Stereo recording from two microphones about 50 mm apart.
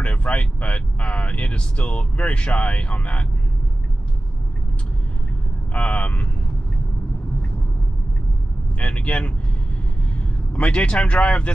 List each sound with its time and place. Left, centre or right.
0.0 s speech: left
5.7 s speech: left
8.7 s speech: left